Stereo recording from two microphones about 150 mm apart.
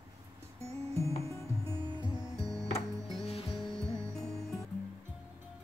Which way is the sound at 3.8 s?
20° right (ahead or behind).